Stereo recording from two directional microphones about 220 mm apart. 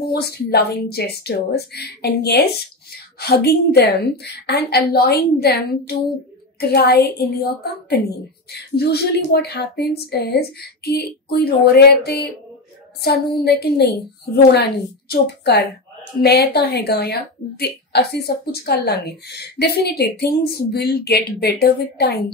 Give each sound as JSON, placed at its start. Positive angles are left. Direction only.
{"t": 0.1, "sound": "speech", "side_deg": 45}
{"t": 8.7, "sound": "speech", "side_deg": 45}